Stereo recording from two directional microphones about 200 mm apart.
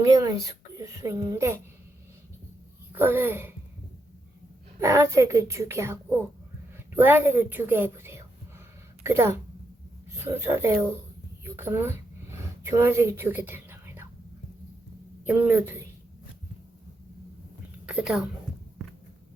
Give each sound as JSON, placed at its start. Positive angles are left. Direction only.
{"t": 0.0, "sound": "a woman's voice", "side_deg": -15}
{"t": 2.9, "sound": "speech", "side_deg": -10}
{"t": 4.8, "sound": "a woman's voice", "side_deg": -15}
{"t": 11.4, "sound": "a sound", "side_deg": -10}
{"t": 15.2, "sound": "speech", "side_deg": -10}
{"t": 17.8, "sound": "a woman's voice", "side_deg": -5}